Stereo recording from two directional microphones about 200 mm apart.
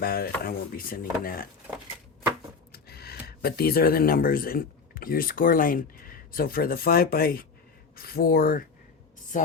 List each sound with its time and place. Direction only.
0.0 s speech: 50° left (ahead or behind)
2.7 s speech: 50° left (ahead or behind)